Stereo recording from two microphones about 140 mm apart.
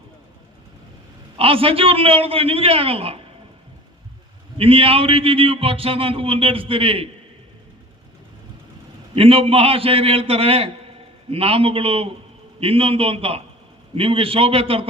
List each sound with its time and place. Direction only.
1.4 s a man's voice: 40° right (ahead or behind)
4.5 s a man's voice: 40° right (ahead or behind)
9.1 s a man's voice: 40° right (ahead or behind)